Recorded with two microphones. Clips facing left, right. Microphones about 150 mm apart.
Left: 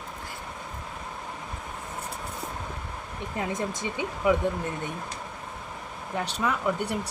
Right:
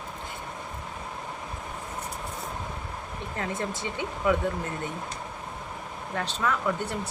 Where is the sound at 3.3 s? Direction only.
15° left (ahead or behind).